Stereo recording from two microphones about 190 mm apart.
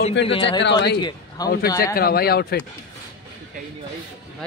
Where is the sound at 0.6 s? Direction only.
65° left (ahead or behind).